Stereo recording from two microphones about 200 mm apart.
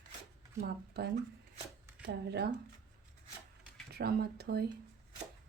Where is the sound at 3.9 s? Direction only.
50° right (ahead or behind).